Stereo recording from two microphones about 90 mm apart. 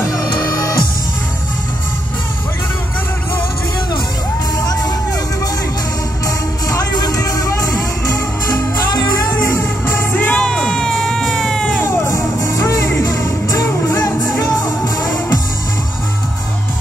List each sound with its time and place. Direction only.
0.0 s music: 35° left (ahead or behind)
0.4 s music: 45° left (ahead or behind)
6.2 s music: 40° left (ahead or behind)
8.9 s music: 45° left (ahead or behind)
9.3 s music: 25° left (ahead or behind)
10.4 s music: 10° left (ahead or behind)
11.8 s music: 25° left (ahead or behind)
14.4 s music: 45° left (ahead or behind)